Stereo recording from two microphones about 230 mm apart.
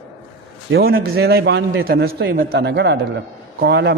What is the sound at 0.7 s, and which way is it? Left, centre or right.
A man's voice, right.